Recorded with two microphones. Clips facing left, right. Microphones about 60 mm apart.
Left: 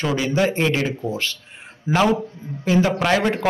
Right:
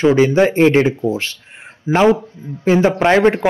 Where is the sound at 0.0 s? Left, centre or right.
Right.